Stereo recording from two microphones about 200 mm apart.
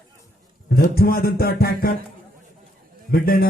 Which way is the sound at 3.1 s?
50° left (ahead or behind).